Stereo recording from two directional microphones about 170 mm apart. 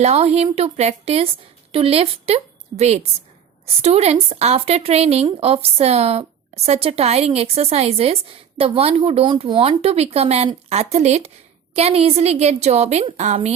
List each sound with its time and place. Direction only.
0.0 s a woman's voice: 40° right (ahead or behind)